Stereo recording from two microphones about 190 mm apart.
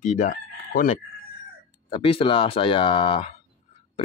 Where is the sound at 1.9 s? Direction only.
30° left (ahead or behind).